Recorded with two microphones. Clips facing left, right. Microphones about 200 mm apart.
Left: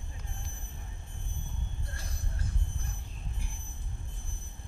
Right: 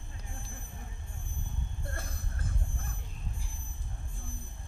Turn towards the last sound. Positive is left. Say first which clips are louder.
# right 1 dB
turn(degrees=-55)  # may be behind; listen again after turning